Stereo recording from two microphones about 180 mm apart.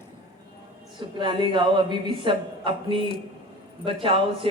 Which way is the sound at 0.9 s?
25° right (ahead or behind).